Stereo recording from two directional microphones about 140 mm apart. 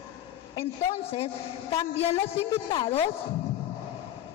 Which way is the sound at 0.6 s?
45° left (ahead or behind).